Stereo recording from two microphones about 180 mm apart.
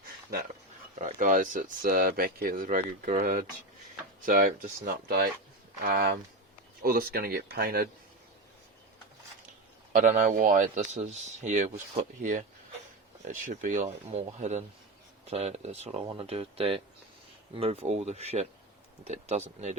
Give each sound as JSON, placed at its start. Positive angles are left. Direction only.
{"t": 0.9, "sound": "speech", "side_deg": -45}
{"t": 9.9, "sound": "speech", "side_deg": -45}